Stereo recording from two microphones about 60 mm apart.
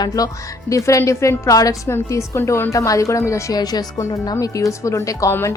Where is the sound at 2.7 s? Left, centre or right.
Left.